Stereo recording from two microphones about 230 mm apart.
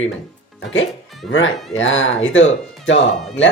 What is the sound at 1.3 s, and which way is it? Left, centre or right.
Speech, left.